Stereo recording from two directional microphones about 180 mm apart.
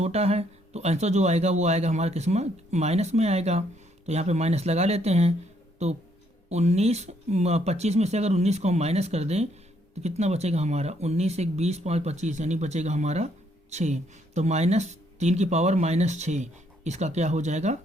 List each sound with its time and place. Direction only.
0.0 s speech: 35° right (ahead or behind)